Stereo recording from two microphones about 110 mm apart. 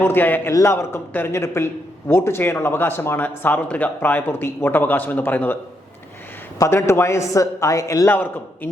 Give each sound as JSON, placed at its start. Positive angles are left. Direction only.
{"t": 0.0, "sound": "a man's voice", "side_deg": 15}
{"t": 6.6, "sound": "a man's voice", "side_deg": 25}